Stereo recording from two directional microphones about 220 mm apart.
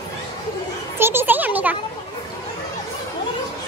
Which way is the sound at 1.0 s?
10° right (ahead or behind).